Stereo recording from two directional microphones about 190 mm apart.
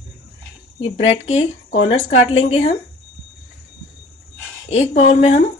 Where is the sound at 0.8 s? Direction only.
35° left (ahead or behind).